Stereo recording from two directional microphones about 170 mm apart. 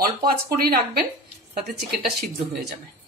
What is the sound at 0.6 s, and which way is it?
Speech, 60° right (ahead or behind).